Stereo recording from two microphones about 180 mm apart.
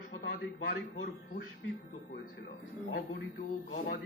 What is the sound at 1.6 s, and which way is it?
A man's voice, 70° left (ahead or behind).